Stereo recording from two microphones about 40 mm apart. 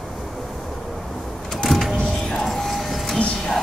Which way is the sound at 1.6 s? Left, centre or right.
Centre.